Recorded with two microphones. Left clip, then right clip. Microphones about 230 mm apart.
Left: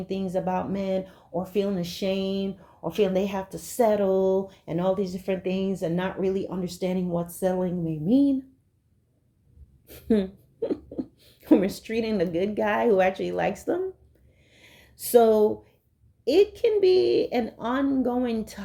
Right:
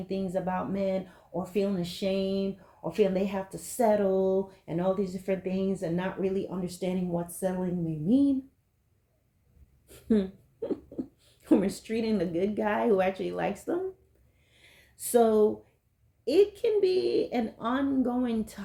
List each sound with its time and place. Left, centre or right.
0.1 s speech: left
9.8 s speech: left
14.5 s a sound: left
16.2 s speech: left